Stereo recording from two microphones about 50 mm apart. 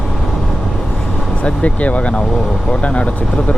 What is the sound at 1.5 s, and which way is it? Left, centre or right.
Speech, left.